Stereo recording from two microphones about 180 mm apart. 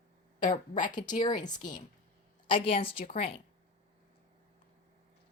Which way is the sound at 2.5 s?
30° left (ahead or behind).